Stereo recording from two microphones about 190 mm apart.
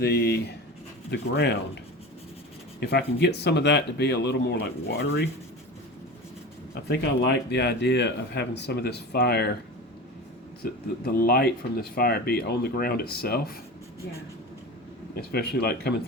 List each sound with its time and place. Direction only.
0.0 s speech: 60° left (ahead or behind)
2.8 s speech: 60° left (ahead or behind)
6.8 s speech: 60° left (ahead or behind)
10.6 s speech: 55° left (ahead or behind)
15.1 s speech: 55° left (ahead or behind)